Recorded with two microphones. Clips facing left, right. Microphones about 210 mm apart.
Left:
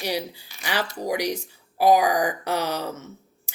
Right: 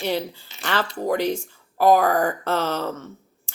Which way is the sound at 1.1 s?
10° left (ahead or behind).